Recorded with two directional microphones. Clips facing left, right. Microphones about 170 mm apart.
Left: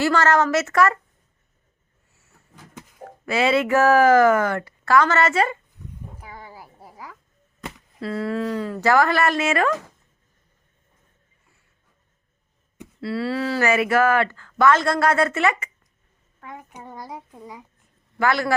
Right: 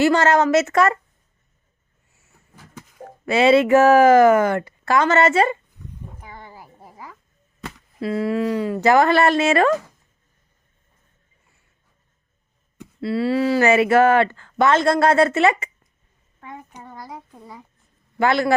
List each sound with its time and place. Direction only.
0.0 s a woman's voice: 20° right (ahead or behind)
3.2 s a woman's voice: 25° right (ahead or behind)
6.2 s a sound: 5° left (ahead or behind)
8.0 s a woman's voice: 15° right (ahead or behind); by 9.7 s 30° right (ahead or behind)
13.0 s a sound: 20° right (ahead or behind)
13.7 s a woman's voice: 25° right (ahead or behind)
16.4 s a child's voice: centre (ahead or behind)
18.2 s a woman's voice: 25° right (ahead or behind)